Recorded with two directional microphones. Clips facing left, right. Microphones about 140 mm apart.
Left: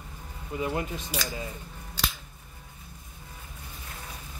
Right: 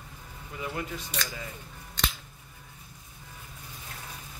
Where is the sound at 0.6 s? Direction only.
25° left (ahead or behind).